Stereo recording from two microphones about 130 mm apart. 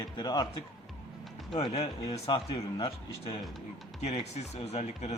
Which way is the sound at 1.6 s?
50° left (ahead or behind).